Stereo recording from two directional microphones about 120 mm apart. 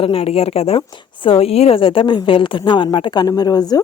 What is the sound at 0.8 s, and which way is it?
A woman's voice, 45° left (ahead or behind).